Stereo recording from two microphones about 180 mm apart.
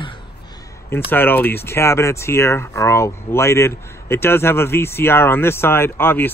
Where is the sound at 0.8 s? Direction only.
10° left (ahead or behind).